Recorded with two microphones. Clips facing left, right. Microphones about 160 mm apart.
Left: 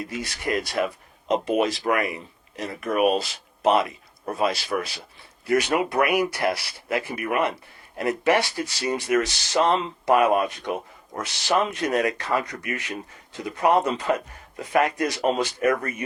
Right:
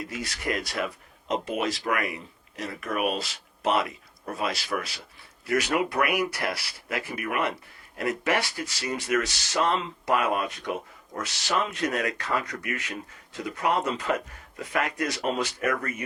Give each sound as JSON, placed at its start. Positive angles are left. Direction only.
{"t": 0.1, "sound": "speech", "side_deg": 30}